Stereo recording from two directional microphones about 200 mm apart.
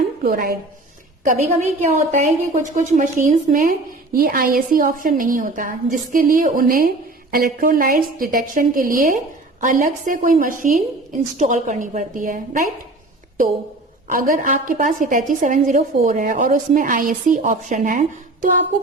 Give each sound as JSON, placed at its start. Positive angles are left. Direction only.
{"t": 0.2, "sound": "a woman's voice", "side_deg": -45}
{"t": 1.6, "sound": "a woman's voice", "side_deg": -35}
{"t": 14.1, "sound": "a woman's voice", "side_deg": -45}